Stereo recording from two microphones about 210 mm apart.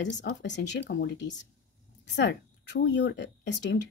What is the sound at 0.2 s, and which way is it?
Speech, 55° left (ahead or behind).